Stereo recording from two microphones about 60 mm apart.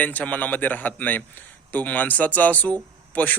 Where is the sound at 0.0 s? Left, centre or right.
Left.